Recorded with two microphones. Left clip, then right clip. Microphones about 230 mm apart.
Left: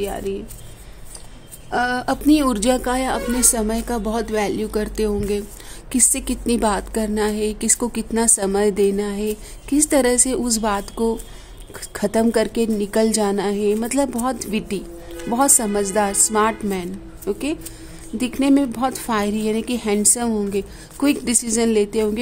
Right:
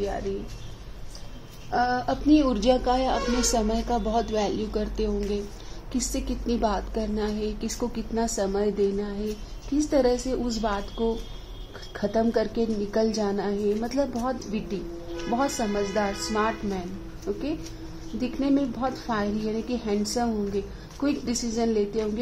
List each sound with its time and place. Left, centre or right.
1.7 s a woman's voice: left